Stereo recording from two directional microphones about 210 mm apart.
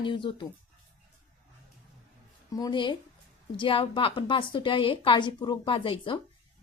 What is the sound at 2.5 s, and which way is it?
A woman's voice, 15° left (ahead or behind).